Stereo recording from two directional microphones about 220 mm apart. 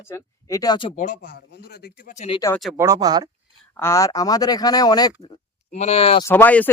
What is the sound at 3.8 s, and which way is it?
Speech, 15° left (ahead or behind).